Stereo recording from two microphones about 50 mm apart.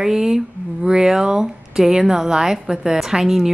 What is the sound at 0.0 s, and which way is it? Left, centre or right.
Speech, centre.